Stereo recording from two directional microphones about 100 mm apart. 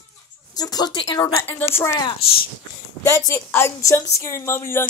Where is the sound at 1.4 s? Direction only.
20° left (ahead or behind).